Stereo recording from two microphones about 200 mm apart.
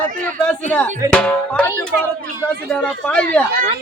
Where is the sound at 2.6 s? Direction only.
5° left (ahead or behind).